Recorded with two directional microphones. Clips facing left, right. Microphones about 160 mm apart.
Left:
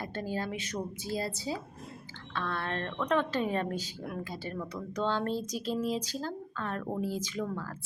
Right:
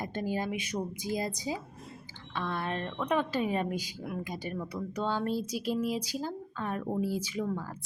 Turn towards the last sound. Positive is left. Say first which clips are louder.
# right 2 dB
turn(degrees=-10)  # may be behind; listen again after turning